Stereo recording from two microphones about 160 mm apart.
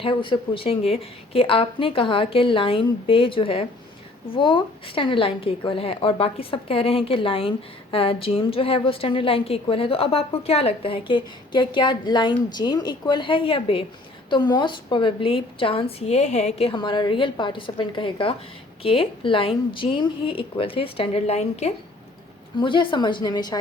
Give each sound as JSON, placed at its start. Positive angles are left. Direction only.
{"t": 0.0, "sound": "a woman's voice", "side_deg": 30}